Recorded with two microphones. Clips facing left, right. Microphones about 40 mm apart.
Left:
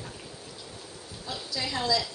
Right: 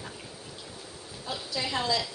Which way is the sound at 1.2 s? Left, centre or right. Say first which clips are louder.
Right 1 dB; right.